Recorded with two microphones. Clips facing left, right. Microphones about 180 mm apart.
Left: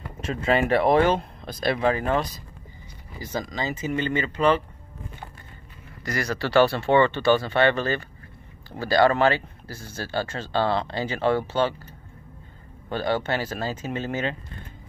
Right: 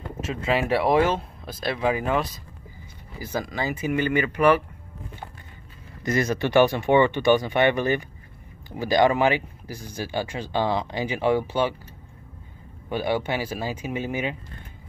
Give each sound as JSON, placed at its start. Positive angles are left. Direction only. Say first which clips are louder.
{"t": 0.2, "sound": "speech", "louder": "left 2 dB", "side_deg": 0}
{"t": 3.2, "sound": "speech", "louder": "right 1 dB", "side_deg": -10}
{"t": 6.0, "sound": "speech", "louder": "right 4 dB", "side_deg": -20}
{"t": 12.9, "sound": "speech", "louder": "even", "side_deg": -10}